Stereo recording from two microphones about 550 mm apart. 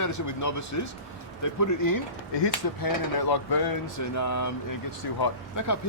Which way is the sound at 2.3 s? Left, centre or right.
Left.